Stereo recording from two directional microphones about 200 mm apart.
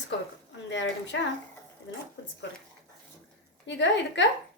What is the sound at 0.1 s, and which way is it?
Speech, 65° left (ahead or behind).